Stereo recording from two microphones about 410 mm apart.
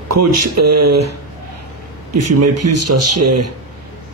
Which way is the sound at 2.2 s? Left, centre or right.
Right.